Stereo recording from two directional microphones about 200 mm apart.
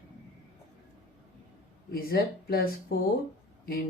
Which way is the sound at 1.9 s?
50° left (ahead or behind).